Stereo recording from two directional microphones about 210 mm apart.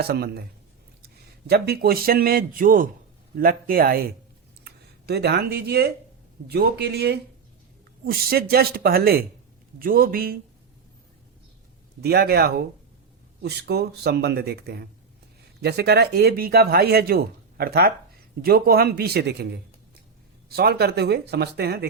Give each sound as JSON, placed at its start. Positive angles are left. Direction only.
{"t": 0.0, "sound": "a man's voice", "side_deg": -50}
{"t": 12.0, "sound": "speech", "side_deg": -50}